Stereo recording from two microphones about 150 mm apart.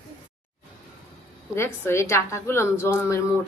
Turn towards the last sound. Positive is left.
turn(degrees=20)  # may be behind; listen again after turning